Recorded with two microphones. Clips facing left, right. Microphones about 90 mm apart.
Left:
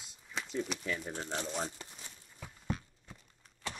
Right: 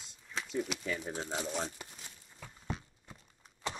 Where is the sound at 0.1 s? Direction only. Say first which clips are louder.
Even; centre (ahead or behind).